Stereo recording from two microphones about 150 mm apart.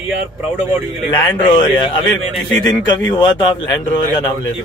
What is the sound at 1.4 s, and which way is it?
A man's voice, 30° left (ahead or behind).